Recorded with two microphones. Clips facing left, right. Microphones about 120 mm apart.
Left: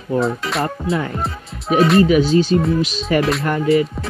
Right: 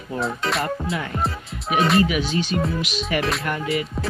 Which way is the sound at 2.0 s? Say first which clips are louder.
Left 9 dB; 35° left (ahead or behind).